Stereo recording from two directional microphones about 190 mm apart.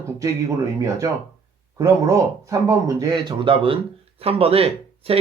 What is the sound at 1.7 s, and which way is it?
Speech, 15° right (ahead or behind).